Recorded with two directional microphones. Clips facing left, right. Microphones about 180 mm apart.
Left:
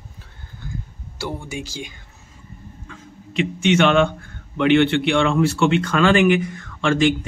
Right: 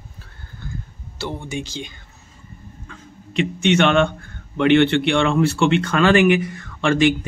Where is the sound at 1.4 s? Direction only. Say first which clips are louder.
Right 2 dB; 5° left (ahead or behind).